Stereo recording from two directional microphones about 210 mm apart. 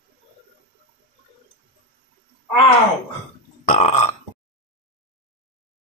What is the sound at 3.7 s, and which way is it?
Burping, 30° left (ahead or behind).